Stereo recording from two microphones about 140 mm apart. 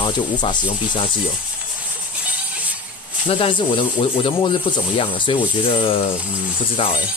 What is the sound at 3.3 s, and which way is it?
Speech, 40° left (ahead or behind).